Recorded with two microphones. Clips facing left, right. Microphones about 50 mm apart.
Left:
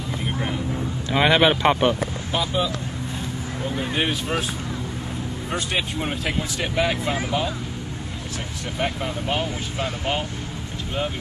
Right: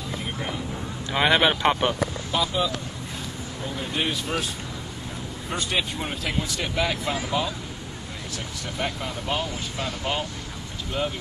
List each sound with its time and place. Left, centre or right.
1.1 s speech: centre
2.3 s speech: left
3.9 s speech: left
5.5 s speech: centre
5.9 s speech: centre
8.7 s speech: centre